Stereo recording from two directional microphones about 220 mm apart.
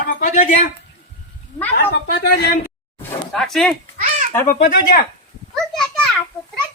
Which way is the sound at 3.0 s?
Centre (ahead or behind).